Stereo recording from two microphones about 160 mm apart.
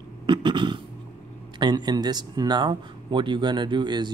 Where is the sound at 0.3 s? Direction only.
30° right (ahead or behind).